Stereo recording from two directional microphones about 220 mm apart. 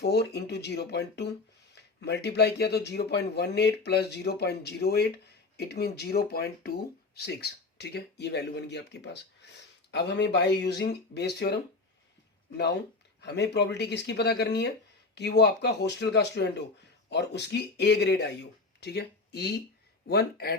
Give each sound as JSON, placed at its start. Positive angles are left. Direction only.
{"t": 0.0, "sound": "speech", "side_deg": 50}
{"t": 13.2, "sound": "speech", "side_deg": 50}